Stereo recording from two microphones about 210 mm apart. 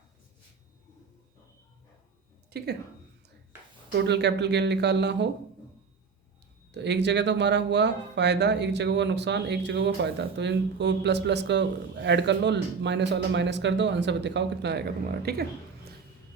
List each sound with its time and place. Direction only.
2.5 s a woman's voice: 50° right (ahead or behind)
3.9 s speech: 55° right (ahead or behind)
6.7 s speech: 55° right (ahead or behind)